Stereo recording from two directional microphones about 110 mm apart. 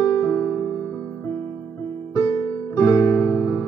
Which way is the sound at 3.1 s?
25° left (ahead or behind).